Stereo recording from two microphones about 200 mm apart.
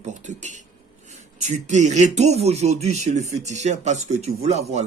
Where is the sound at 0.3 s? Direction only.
35° right (ahead or behind).